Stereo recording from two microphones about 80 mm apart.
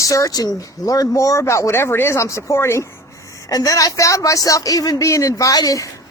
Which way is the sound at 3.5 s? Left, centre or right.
Left.